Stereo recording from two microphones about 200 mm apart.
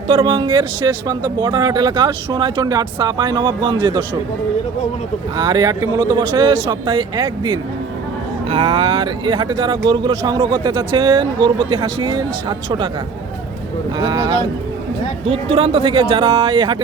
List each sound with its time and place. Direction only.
0.1 s speech: 25° right (ahead or behind)
5.4 s speech: 20° right (ahead or behind)
14.0 s speech: 20° right (ahead or behind)